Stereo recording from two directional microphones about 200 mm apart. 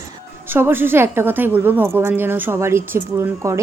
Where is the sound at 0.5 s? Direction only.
10° right (ahead or behind).